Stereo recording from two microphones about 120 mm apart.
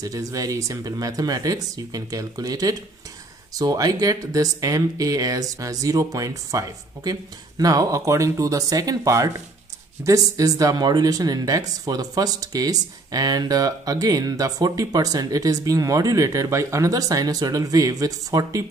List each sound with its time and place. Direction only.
0.0 s speech: 30° right (ahead or behind)